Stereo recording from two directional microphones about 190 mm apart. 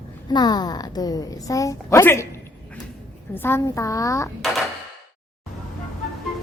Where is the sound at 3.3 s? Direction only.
10° left (ahead or behind).